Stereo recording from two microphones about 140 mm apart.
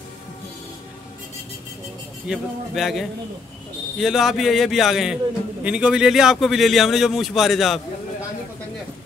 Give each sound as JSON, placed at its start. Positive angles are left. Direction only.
{"t": 2.2, "sound": "a man's voice", "side_deg": 0}